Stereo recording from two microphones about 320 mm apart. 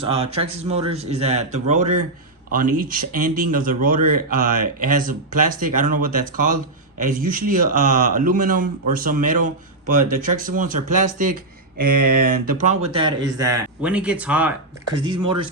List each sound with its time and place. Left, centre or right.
0.1 s speech: centre
11.9 s a sound: right
12.5 s speech: right